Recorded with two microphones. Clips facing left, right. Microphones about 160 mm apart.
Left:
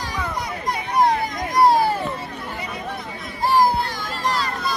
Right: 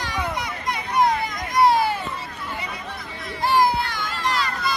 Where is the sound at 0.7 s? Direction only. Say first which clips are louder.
Left 2 dB; 35° left (ahead or behind).